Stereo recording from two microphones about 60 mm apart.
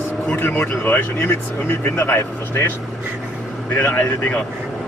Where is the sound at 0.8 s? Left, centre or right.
Left.